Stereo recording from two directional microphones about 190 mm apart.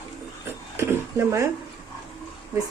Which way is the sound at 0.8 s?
15° right (ahead or behind).